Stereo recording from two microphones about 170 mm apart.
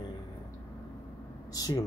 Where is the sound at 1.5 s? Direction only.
20° left (ahead or behind).